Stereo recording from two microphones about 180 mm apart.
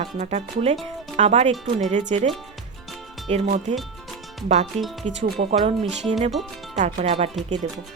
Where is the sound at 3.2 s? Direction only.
40° right (ahead or behind).